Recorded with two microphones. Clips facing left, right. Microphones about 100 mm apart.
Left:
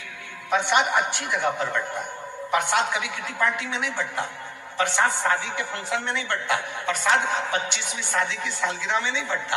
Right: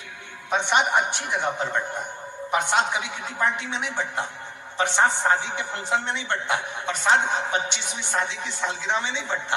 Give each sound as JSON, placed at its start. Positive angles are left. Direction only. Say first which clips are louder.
{"t": 0.5, "sound": "a man's voice", "louder": "even", "side_deg": -20}